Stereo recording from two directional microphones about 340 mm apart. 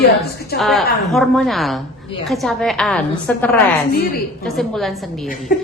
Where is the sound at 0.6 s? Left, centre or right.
Centre.